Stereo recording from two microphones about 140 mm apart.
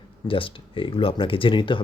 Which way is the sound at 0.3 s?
40° left (ahead or behind).